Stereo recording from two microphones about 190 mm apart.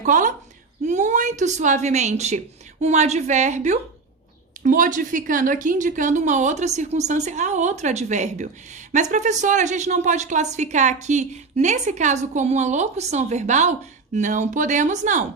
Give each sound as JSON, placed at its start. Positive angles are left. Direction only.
{"t": 0.0, "sound": "speech", "side_deg": -40}